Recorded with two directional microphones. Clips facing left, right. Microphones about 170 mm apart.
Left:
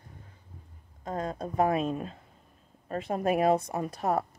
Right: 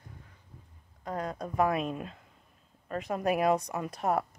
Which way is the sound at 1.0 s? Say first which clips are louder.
Left 2 dB; 25° left (ahead or behind).